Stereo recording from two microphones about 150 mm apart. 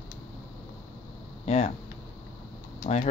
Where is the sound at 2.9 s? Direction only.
45° left (ahead or behind).